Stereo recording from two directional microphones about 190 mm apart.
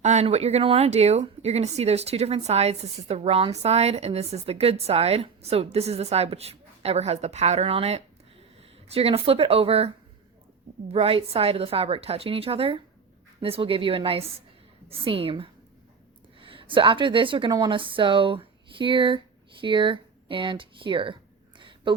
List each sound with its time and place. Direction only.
0.0 s speech: 35° right (ahead or behind)
10.9 s a woman's voice: 30° right (ahead or behind)
21.6 s a sound: 25° right (ahead or behind)